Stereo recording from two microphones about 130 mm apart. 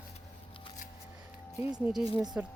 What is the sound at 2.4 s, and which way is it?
Speech, 15° right (ahead or behind).